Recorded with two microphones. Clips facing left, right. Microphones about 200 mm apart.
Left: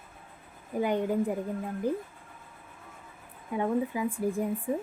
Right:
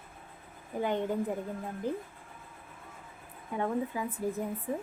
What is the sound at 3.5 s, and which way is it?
Speech, 10° left (ahead or behind).